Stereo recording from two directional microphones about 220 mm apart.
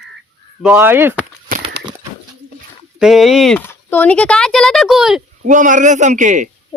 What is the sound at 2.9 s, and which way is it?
Speech, centre (ahead or behind).